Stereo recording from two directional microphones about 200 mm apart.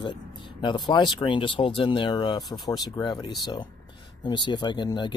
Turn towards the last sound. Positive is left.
turn(degrees=20)  # may be behind; listen again after turning